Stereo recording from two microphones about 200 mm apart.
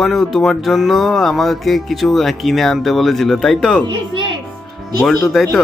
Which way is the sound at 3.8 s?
25° right (ahead or behind).